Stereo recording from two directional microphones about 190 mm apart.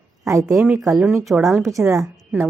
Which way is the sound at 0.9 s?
Centre (ahead or behind).